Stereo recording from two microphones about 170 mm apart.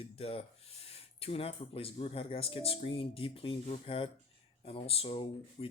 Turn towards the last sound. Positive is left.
turn(degrees=35)  # may be behind; listen again after turning